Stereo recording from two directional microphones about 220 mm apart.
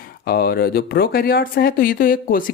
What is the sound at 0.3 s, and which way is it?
Speech, 45° left (ahead or behind).